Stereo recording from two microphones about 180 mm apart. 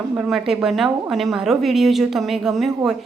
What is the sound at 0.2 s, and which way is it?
A woman's voice, centre (ahead or behind).